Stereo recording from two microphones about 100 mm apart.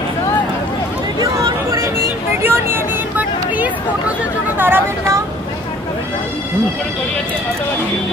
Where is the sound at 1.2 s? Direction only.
35° right (ahead or behind).